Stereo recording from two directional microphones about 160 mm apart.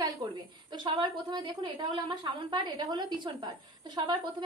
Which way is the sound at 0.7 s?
30° right (ahead or behind).